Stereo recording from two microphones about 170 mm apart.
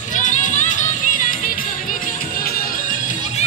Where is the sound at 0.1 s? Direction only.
50° left (ahead or behind).